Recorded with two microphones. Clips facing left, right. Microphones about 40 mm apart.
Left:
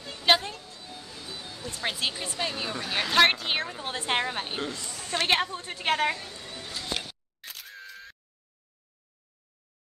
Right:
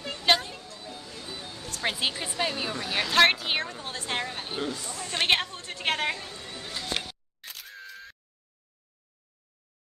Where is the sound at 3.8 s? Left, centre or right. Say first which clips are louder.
Left 4 dB; left.